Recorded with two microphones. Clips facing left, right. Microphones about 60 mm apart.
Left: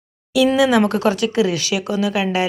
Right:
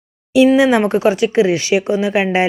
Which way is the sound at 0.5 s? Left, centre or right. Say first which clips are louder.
Right 3 dB; right.